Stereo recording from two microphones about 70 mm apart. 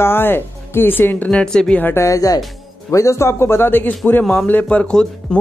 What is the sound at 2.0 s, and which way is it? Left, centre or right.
Speech, left.